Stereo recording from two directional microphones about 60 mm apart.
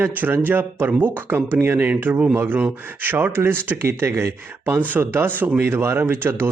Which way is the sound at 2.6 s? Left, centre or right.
Right.